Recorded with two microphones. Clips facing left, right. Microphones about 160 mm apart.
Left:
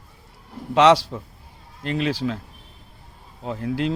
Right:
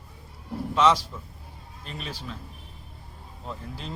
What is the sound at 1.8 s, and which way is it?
Speech, 90° left.